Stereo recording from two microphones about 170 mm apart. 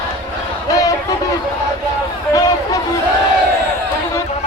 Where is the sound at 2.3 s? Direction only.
20° left (ahead or behind).